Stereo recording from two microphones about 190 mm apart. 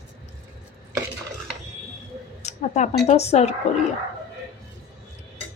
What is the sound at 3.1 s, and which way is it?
Speech, 35° left (ahead or behind).